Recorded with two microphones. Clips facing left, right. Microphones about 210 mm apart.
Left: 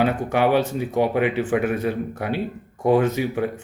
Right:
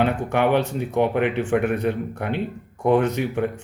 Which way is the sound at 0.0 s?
5° left (ahead or behind).